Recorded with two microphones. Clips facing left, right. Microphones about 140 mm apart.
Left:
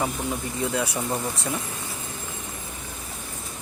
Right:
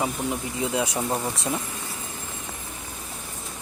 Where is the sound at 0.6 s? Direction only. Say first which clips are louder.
Right 1 dB; 20° right (ahead or behind).